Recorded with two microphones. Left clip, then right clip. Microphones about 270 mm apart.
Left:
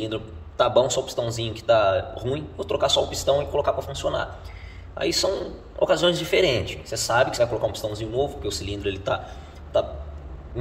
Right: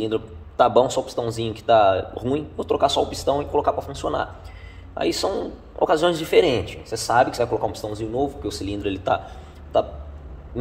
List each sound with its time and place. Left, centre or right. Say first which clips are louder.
0.0 s a man's voice: right 5 dB; right